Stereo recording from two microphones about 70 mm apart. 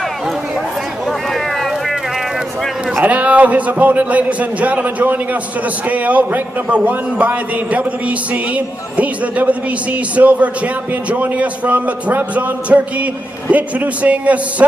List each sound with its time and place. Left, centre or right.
3.0 s a man's voice: centre